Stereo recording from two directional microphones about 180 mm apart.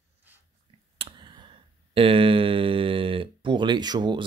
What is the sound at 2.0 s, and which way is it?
Speech, 30° right (ahead or behind).